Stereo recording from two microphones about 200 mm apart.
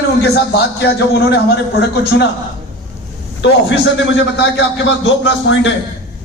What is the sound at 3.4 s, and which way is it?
A man's voice, 65° left (ahead or behind).